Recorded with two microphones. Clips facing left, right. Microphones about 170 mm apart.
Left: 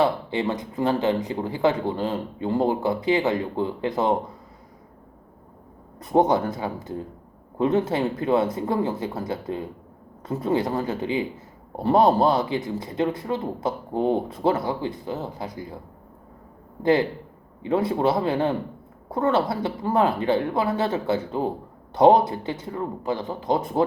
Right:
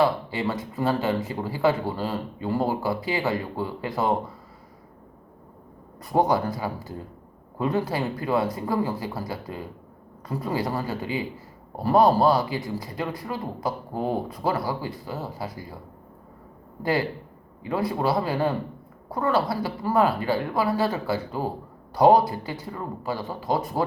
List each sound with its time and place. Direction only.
0.0 s speech: 20° left (ahead or behind)
6.0 s speech: 20° left (ahead or behind)
16.8 s speech: 20° left (ahead or behind)